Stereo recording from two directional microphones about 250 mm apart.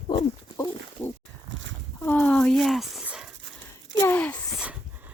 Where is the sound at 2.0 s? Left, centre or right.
Centre.